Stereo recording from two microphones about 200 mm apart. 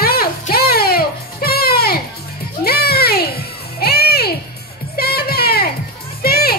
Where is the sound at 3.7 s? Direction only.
50° left (ahead or behind).